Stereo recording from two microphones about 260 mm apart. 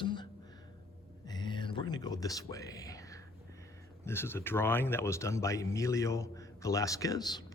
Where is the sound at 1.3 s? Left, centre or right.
Centre.